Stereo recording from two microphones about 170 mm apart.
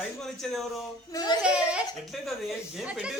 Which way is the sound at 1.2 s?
20° left (ahead or behind).